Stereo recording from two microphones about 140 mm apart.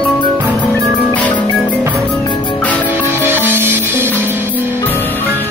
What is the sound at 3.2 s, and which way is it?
Music, 15° right (ahead or behind).